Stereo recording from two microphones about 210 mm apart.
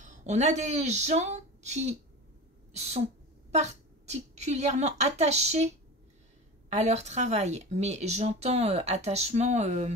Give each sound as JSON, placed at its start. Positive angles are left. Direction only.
{"t": 0.0, "sound": "speech", "side_deg": -35}
{"t": 6.7, "sound": "speech", "side_deg": -30}